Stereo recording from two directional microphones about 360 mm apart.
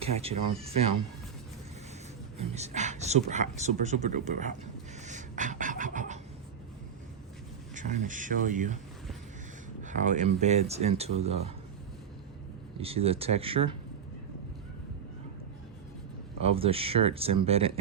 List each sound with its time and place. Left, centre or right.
0.0 s speech: centre
2.4 s speech: centre
7.8 s speech: right
9.8 s speech: right
12.8 s speech: centre
16.4 s speech: centre